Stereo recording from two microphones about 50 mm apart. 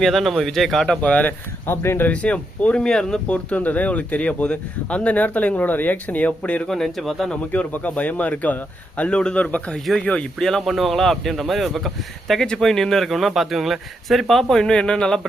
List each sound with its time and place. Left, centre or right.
0.0 s a man's voice: centre
1.0 s speech: left
1.6 s speech: left
2.1 s speech: left
2.8 s speech: centre
3.2 s speech: left
6.7 s a man's voice: centre
7.5 s speech: left
9.1 s speech: centre
9.4 s speech: left
10.3 s speech: centre
10.6 s a man's voice: centre
12.3 s a man's voice: centre